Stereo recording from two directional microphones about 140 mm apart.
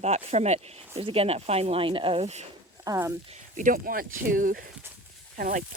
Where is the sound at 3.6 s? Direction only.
80° right.